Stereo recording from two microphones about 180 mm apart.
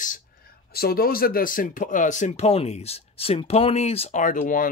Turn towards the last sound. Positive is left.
turn(degrees=50)  # may be behind; listen again after turning